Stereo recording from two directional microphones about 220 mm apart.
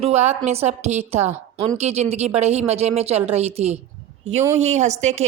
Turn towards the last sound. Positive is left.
turn(degrees=-30)  # may be behind; listen again after turning